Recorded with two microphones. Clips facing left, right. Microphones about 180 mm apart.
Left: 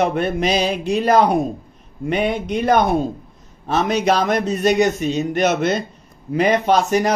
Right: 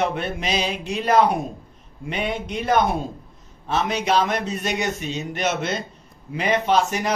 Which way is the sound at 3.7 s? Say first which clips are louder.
Left 4 dB; 40° left (ahead or behind).